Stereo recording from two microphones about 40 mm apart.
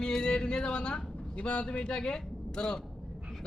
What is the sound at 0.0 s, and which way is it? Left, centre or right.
Speech, left.